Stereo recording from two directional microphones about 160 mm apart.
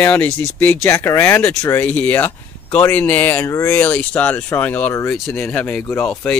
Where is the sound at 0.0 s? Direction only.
10° left (ahead or behind).